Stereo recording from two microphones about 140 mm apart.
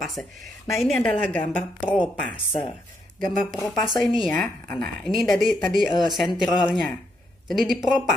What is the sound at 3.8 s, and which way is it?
Speech, centre (ahead or behind).